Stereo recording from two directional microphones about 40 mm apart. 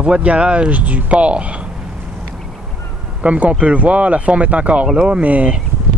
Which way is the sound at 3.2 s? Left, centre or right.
Right.